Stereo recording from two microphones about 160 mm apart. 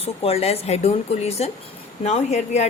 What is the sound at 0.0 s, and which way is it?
A woman's voice, 40° left (ahead or behind).